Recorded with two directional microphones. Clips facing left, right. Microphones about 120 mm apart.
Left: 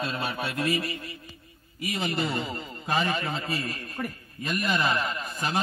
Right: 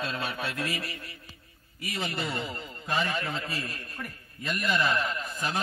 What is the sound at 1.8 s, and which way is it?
A man's voice, 15° left (ahead or behind).